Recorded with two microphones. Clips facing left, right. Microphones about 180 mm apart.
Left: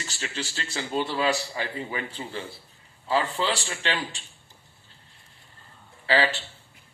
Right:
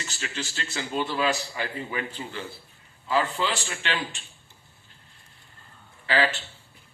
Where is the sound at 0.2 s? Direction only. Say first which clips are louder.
Left 1 dB; 35° left (ahead or behind).